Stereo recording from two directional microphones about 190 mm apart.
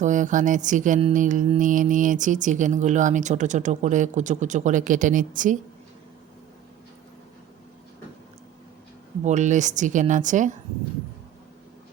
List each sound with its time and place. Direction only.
0.0 s music: 40° right (ahead or behind)
9.2 s music: 40° right (ahead or behind)